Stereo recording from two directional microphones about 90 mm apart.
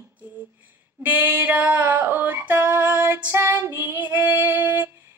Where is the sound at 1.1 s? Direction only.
20° right (ahead or behind).